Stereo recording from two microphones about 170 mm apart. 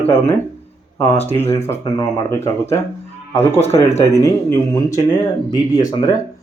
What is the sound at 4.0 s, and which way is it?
Speech, 15° left (ahead or behind).